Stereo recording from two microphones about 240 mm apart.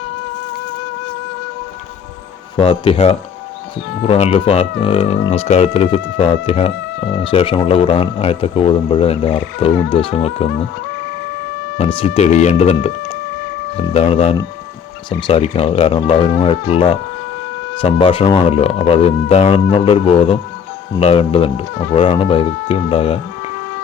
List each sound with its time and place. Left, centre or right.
2.6 s a man's voice: left
11.8 s a man's voice: left